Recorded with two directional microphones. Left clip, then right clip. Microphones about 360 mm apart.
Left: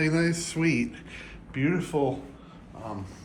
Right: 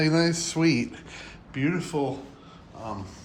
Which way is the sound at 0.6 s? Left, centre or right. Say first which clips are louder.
Right 2 dB; right.